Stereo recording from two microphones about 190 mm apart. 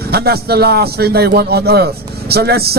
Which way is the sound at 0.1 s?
55° right (ahead or behind).